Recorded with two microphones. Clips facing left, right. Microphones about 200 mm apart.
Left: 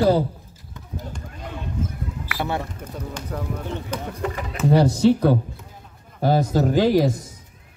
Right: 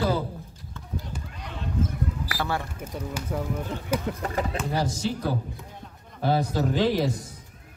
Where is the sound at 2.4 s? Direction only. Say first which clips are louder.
Left 4 dB; 20° left (ahead or behind).